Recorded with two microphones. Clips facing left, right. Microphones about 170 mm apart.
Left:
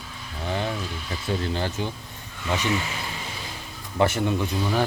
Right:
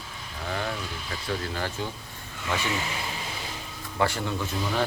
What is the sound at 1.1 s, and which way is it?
Speech, 25° left (ahead or behind).